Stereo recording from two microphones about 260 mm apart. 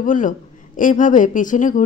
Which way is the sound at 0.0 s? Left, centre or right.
Left.